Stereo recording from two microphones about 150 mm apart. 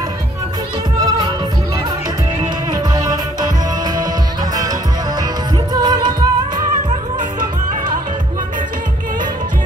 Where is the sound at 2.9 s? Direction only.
25° right (ahead or behind).